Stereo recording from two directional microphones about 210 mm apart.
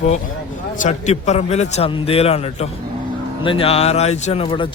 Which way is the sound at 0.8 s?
35° left (ahead or behind).